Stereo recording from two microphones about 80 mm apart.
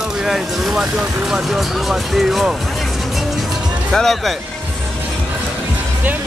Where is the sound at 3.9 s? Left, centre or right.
Centre.